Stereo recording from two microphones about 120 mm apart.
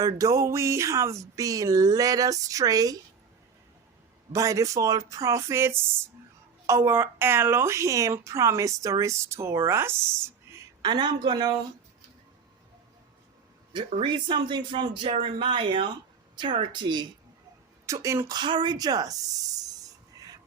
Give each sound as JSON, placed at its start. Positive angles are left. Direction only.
{"t": 0.0, "sound": "a woman's voice", "side_deg": -30}
{"t": 4.3, "sound": "a woman's voice", "side_deg": -25}
{"t": 10.8, "sound": "speech", "side_deg": -35}
{"t": 13.7, "sound": "speech", "side_deg": -45}
{"t": 17.8, "sound": "a woman's voice", "side_deg": -25}
{"t": 18.3, "sound": "speech", "side_deg": -40}
{"t": 20.1, "sound": "whispering", "side_deg": -30}